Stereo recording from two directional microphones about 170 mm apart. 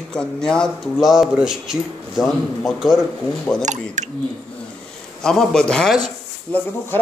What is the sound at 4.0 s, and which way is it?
Speech, 45° right (ahead or behind).